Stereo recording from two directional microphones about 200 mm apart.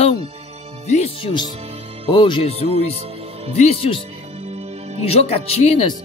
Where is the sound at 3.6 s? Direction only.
30° left (ahead or behind).